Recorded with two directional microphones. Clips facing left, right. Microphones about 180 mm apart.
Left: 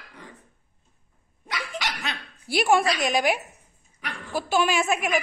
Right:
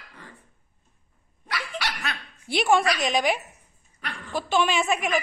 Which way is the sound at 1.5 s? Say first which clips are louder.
Even; 20° left (ahead or behind).